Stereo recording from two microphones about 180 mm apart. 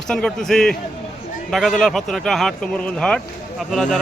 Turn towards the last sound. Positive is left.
turn(degrees=0)  # may be behind; listen again after turning